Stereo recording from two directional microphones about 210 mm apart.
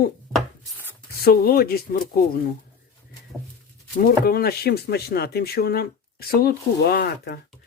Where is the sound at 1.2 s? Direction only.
45° left (ahead or behind).